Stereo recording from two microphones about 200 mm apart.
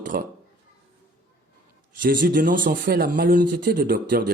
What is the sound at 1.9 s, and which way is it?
Speech, 45° right (ahead or behind).